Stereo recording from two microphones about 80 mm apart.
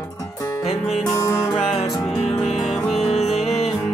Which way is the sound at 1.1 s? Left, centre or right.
Left.